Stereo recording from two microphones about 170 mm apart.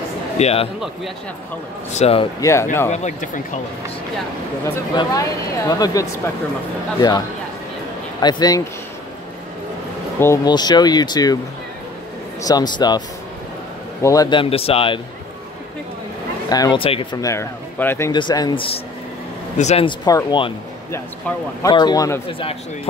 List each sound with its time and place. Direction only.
0.4 s speech: 35° left (ahead or behind)
1.9 s speech: 40° left (ahead or behind)
2.4 s speech: 15° left (ahead or behind)
2.9 s speech: 40° left (ahead or behind)
4.9 s speech: 20° left (ahead or behind)
8.2 s speech: 25° left (ahead or behind)
10.2 s speech: 20° left (ahead or behind)
12.4 s speech: 20° left (ahead or behind)
14.0 s speech: 20° left (ahead or behind)
16.4 s speech: 20° left (ahead or behind)
18.1 s speech: 25° left (ahead or behind)
21.6 s speech: 25° left (ahead or behind)